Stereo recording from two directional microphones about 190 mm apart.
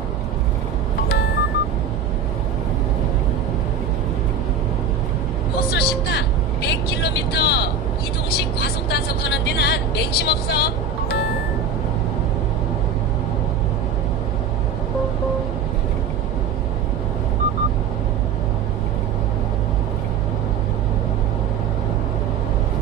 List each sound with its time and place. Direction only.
5.7 s vehicle: 60° left (ahead or behind)
8.3 s music: 60° left (ahead or behind)